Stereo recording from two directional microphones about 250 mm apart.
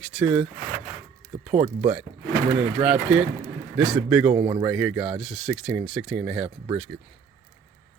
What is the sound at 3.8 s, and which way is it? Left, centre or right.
Speech, centre.